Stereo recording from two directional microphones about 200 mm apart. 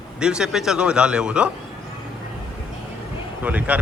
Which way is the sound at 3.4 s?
10° right (ahead or behind).